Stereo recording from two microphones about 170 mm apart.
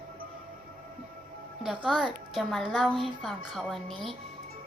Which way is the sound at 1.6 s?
5° right (ahead or behind).